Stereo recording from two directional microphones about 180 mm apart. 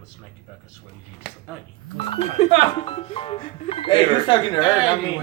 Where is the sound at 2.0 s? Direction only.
30° left (ahead or behind).